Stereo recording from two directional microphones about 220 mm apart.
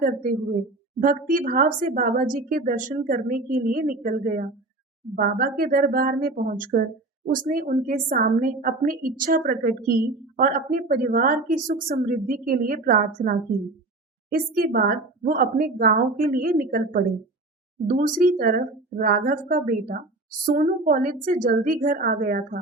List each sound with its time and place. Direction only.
0.0 s a woman's voice: 40° right (ahead or behind)